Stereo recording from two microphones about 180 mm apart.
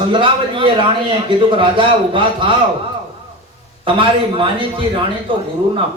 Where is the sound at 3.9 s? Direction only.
30° right (ahead or behind).